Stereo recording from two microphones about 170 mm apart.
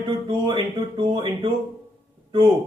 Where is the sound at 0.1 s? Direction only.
30° right (ahead or behind).